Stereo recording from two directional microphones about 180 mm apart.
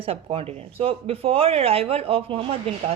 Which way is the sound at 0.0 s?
30° right (ahead or behind).